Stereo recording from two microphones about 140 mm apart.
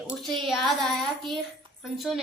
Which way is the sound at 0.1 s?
Centre (ahead or behind).